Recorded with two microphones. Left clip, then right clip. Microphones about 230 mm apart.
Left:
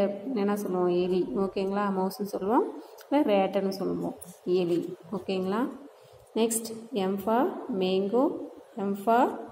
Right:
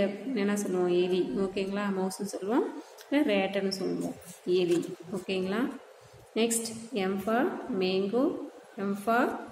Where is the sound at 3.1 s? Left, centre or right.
Centre.